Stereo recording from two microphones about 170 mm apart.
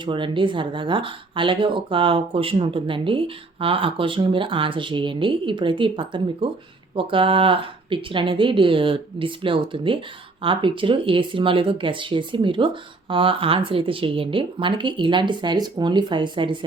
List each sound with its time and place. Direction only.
0.0 s speech: 30° right (ahead or behind)